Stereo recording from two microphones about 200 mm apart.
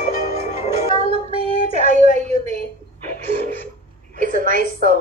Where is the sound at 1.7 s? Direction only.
35° right (ahead or behind).